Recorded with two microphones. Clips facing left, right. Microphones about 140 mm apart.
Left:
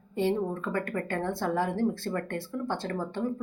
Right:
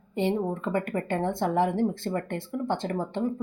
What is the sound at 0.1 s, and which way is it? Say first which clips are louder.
Speech: right 1 dB; 20° right (ahead or behind).